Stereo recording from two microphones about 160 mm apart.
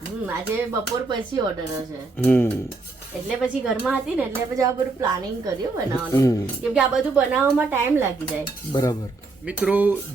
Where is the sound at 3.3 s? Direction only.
5° right (ahead or behind).